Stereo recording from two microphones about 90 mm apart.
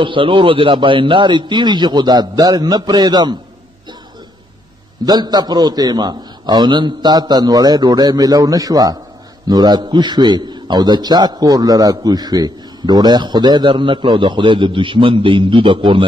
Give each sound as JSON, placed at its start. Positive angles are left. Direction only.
{"t": 0.0, "sound": "a man's voice", "side_deg": -70}
{"t": 5.0, "sound": "a man's voice", "side_deg": -50}